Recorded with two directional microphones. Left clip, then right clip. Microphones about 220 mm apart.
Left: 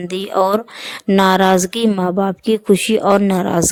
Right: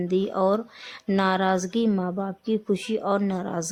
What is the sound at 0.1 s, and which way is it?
Speech, 45° left (ahead or behind).